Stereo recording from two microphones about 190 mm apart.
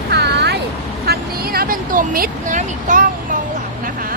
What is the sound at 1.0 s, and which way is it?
Vehicle, 50° right (ahead or behind).